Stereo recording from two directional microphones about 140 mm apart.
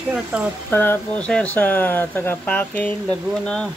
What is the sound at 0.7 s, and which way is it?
Speech, 15° left (ahead or behind).